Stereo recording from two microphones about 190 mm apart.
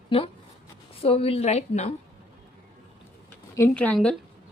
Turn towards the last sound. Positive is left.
turn(degrees=5)  # may be behind; listen again after turning